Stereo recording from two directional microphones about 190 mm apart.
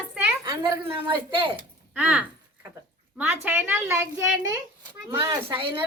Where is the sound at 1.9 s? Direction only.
5° right (ahead or behind).